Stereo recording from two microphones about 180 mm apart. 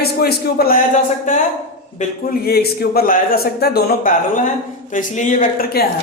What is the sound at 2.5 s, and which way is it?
Speech, 60° left (ahead or behind).